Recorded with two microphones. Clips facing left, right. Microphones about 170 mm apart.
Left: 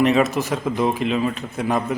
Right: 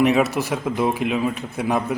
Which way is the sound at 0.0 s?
10° right (ahead or behind).